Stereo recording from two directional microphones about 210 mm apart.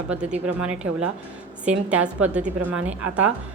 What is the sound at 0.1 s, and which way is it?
A woman's voice, 5° right (ahead or behind).